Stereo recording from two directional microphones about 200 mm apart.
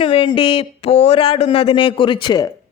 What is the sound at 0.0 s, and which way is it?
A woman's voice, 25° left (ahead or behind).